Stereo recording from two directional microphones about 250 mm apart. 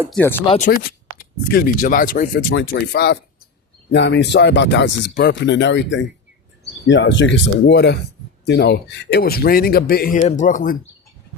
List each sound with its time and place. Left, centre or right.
0.1 s speech: centre
0.5 s speech: left